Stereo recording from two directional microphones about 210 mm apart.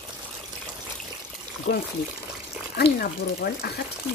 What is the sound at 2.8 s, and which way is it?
Speech, 45° left (ahead or behind).